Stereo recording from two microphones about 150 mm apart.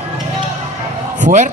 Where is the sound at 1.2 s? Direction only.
55° right (ahead or behind).